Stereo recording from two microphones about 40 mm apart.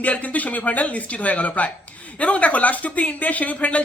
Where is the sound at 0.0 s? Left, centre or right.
Left.